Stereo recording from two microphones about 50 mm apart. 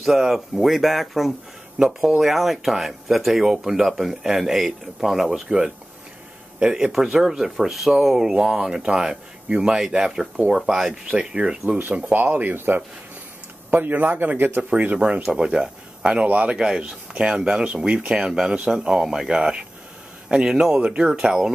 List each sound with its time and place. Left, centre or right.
0.0 s speech: centre
1.8 s speech: centre
12.1 s a man's voice: right
14.6 s speech: right
15.3 s speech: centre
16.5 s speech: centre
21.1 s speech: centre